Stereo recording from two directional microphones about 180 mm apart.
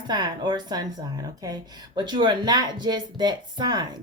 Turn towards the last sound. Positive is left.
turn(degrees=-25)  # may be behind; listen again after turning